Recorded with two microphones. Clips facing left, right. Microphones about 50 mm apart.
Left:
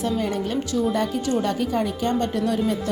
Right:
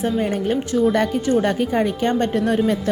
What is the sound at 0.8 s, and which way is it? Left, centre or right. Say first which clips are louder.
A woman's voice: right 5 dB; right.